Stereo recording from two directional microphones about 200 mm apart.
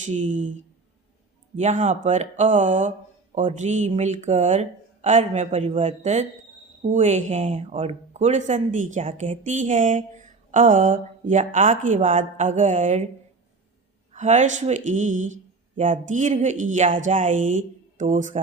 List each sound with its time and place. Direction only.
0.0 s speech: 35° right (ahead or behind)
14.1 s speech: 35° right (ahead or behind)